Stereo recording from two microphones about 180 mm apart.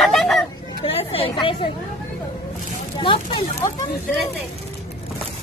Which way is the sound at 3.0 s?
25° left (ahead or behind).